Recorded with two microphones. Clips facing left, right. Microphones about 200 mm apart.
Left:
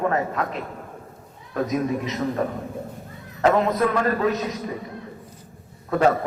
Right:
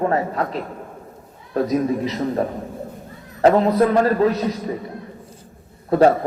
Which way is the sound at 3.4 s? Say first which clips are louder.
Right 5 dB; 35° right (ahead or behind).